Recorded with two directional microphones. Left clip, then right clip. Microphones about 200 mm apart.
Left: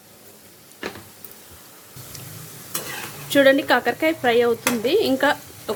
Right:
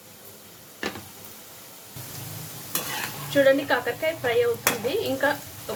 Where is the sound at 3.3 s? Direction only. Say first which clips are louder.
Left 4 dB; 55° left (ahead or behind).